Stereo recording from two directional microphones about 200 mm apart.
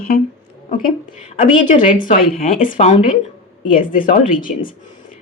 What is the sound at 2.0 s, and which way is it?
Speech, 40° left (ahead or behind).